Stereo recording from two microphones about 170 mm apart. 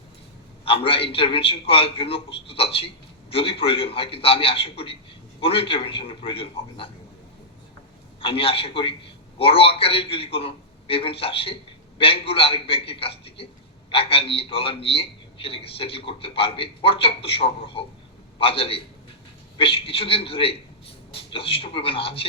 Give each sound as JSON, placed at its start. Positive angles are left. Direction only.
{"t": 0.6, "sound": "a man's voice", "side_deg": 35}
{"t": 8.2, "sound": "a man's voice", "side_deg": 30}